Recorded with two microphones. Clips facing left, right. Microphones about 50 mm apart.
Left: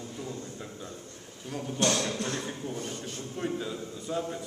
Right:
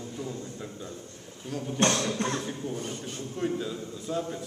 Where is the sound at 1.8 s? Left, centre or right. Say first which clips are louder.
Right 2 dB; right.